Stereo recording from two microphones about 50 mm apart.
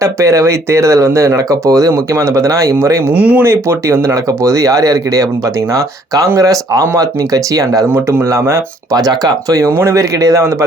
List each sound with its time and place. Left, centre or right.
0.0 s speech: right
3.1 s speech: right
3.4 s speech: right
6.3 s speech: right
7.9 s speech: right
8.2 s speech: right